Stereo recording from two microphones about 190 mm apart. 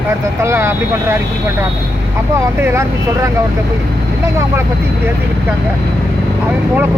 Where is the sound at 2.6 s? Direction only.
15° right (ahead or behind).